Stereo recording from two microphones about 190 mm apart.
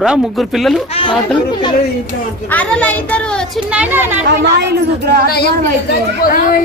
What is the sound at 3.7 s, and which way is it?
Speech, 10° right (ahead or behind).